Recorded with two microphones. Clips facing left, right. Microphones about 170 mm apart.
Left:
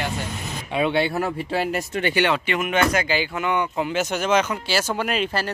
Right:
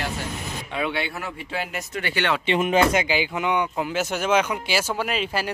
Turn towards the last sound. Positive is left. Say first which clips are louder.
# left 2 dB
turn(degrees=-5)  # may be behind; listen again after turning